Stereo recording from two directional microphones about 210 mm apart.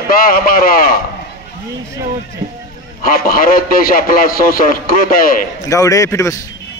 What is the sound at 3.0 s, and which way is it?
A man's voice, 45° left (ahead or behind).